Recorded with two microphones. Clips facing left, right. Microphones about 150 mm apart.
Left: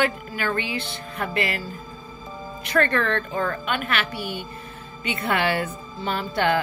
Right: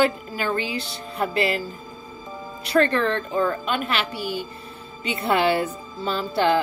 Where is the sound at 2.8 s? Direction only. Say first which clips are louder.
Right 2 dB; 25° right (ahead or behind).